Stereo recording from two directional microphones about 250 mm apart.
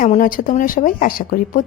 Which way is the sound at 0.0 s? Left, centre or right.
Left.